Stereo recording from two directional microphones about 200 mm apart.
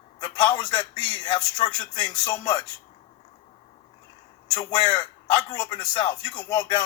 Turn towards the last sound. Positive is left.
turn(degrees=25)  # may be behind; listen again after turning